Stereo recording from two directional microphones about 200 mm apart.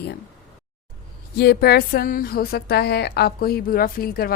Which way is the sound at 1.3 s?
55° left (ahead or behind).